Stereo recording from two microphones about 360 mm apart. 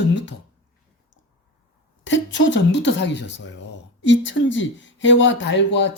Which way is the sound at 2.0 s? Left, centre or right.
Left.